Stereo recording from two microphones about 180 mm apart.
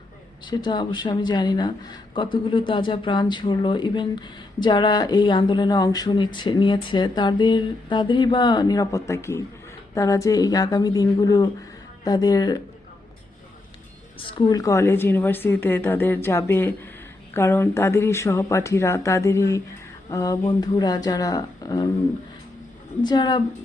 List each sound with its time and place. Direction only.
0.4 s speech: 25° left (ahead or behind)
14.2 s a woman's voice: 30° left (ahead or behind)
23.0 s speech: 25° left (ahead or behind)